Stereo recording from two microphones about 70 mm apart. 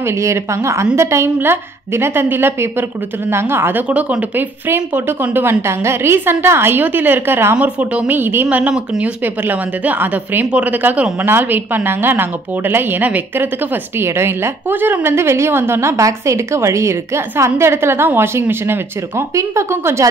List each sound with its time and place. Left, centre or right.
0.0 s a woman's voice: right
3.9 s speech: right
4.6 s a woman's voice: right
7.5 s speech: centre
9.2 s speech: right
10.4 s speech: centre
10.7 s a woman's voice: right
13.9 s a woman's voice: right